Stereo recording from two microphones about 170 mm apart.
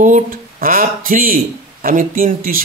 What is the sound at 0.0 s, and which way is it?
Speech, 50° right (ahead or behind).